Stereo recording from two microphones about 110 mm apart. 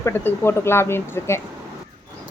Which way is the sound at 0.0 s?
20° left (ahead or behind).